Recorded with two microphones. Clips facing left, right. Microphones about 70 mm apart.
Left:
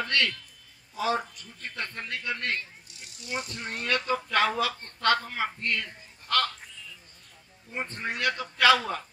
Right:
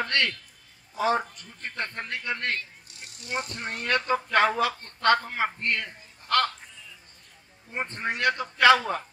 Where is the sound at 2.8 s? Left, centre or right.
Right.